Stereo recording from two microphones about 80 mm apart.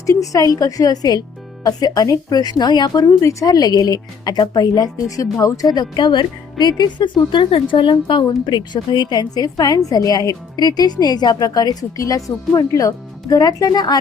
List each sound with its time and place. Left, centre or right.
0.0 s a woman's voice: left
8.4 s a woman's voice: left